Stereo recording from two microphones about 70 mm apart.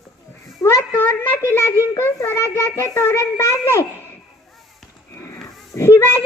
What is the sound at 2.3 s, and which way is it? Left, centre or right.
Child singing, left.